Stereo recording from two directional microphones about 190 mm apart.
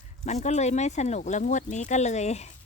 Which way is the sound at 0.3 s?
35° left (ahead or behind).